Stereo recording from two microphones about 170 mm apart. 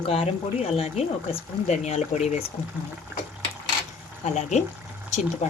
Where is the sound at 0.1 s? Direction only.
35° left (ahead or behind).